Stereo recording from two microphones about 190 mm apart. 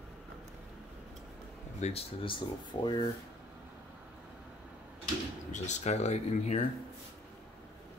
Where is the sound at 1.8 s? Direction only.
30° left (ahead or behind).